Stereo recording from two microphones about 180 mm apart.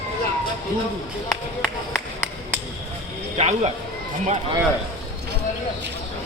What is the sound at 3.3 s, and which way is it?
Speech, 40° right (ahead or behind).